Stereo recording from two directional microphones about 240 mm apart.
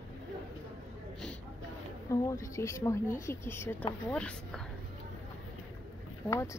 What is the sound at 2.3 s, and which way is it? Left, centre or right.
Speech, centre.